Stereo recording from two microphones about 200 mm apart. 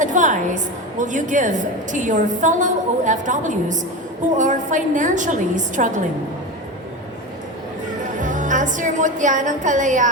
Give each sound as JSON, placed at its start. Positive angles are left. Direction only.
{"t": 0.0, "sound": "a woman's voice", "side_deg": -40}
{"t": 8.2, "sound": "a woman's voice", "side_deg": -40}